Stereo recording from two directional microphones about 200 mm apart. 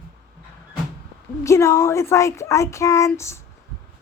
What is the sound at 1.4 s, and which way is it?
Speech, 15° left (ahead or behind).